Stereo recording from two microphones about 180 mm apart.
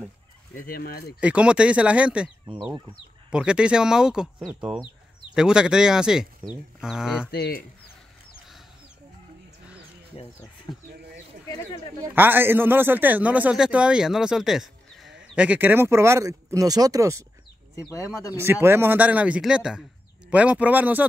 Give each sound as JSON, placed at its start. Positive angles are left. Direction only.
{"t": 0.6, "sound": "speech", "side_deg": 55}
{"t": 1.2, "sound": "a man's voice", "side_deg": -5}
{"t": 3.3, "sound": "speech", "side_deg": -5}
{"t": 7.2, "sound": "speech", "side_deg": 60}
{"t": 10.7, "sound": "speech", "side_deg": 25}
{"t": 12.0, "sound": "a man's voice", "side_deg": -10}
{"t": 17.7, "sound": "speech", "side_deg": 20}
{"t": 18.3, "sound": "a man's voice", "side_deg": -15}